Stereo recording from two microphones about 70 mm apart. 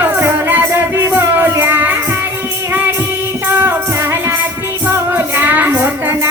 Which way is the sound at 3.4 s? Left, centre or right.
Right.